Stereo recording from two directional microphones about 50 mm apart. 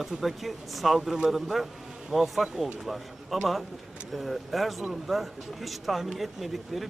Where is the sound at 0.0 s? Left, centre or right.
Centre.